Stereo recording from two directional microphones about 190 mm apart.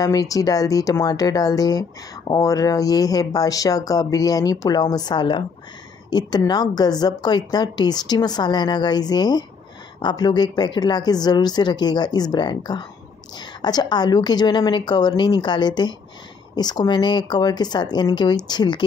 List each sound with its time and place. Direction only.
0.0 s speech: 20° left (ahead or behind)